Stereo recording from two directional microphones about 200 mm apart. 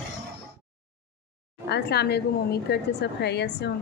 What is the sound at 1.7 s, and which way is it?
A woman's voice, 55° left (ahead or behind).